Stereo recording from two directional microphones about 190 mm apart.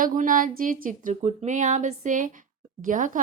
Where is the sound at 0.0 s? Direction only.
45° right (ahead or behind).